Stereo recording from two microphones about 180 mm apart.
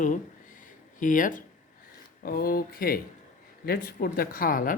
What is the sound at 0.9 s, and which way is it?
Speech, 45° left (ahead or behind).